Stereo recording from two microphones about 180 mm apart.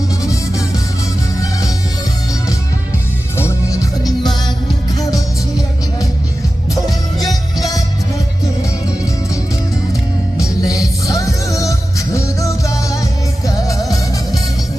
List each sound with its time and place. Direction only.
0.2 s music: 20° left (ahead or behind)
3.3 s music: 15° left (ahead or behind)
6.7 s music: 20° left (ahead or behind)
10.4 s music: 20° left (ahead or behind)